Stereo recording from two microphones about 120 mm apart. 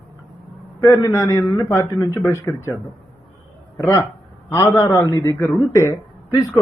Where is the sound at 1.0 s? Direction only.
20° left (ahead or behind).